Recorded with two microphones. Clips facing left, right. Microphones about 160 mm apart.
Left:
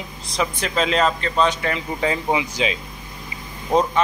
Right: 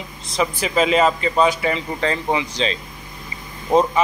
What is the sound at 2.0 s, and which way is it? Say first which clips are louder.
Speech: even; 10° left (ahead or behind).